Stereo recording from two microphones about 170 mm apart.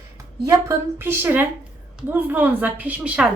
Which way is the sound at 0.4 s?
20° right (ahead or behind).